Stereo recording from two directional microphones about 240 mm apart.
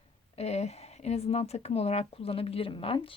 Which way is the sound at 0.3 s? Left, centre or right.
Left.